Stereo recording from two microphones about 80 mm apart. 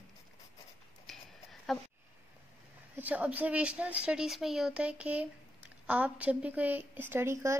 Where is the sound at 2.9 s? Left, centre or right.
Centre.